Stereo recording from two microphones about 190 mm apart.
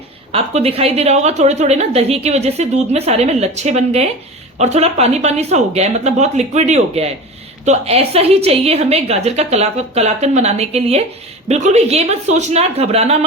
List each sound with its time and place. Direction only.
0.3 s a woman's voice: 30° right (ahead or behind)